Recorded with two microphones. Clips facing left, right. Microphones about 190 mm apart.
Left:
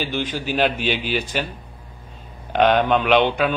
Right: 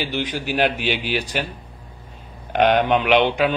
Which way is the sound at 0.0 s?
15° right (ahead or behind).